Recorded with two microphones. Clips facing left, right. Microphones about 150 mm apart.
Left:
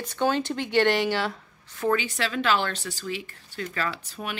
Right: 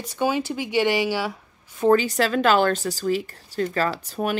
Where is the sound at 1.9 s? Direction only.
40° right (ahead or behind).